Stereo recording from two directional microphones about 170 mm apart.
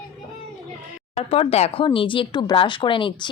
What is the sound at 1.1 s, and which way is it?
Speech, 35° left (ahead or behind).